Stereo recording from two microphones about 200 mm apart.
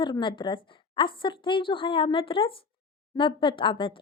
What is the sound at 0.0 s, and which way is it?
Speech, 25° left (ahead or behind).